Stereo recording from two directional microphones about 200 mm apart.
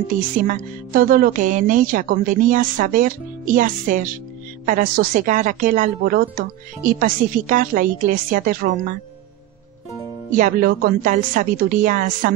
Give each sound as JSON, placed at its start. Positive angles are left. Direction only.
{"t": 0.4, "sound": "a woman's voice", "side_deg": -45}
{"t": 10.3, "sound": "a woman's voice", "side_deg": -45}